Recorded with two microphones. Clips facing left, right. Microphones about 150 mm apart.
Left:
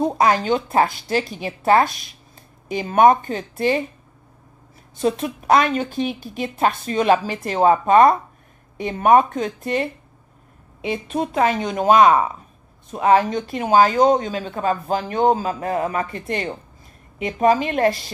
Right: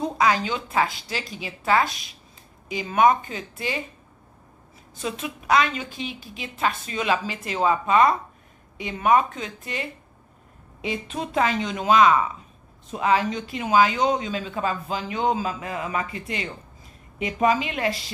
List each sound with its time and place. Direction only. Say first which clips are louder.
0.0 s a woman's voice: left 4 dB; 45° left (ahead or behind)
5.0 s a woman's voice: left 9 dB; 45° left (ahead or behind)
13.7 s a woman's voice: left 5 dB; 40° left (ahead or behind)
14.3 s a woman's voice: left 4 dB; 55° left (ahead or behind)